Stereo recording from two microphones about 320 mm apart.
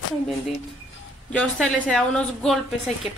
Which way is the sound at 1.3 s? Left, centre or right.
Centre.